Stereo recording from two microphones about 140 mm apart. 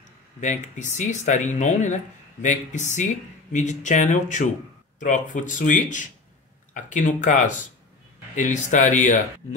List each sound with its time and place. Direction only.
0.4 s speech: 60° left (ahead or behind)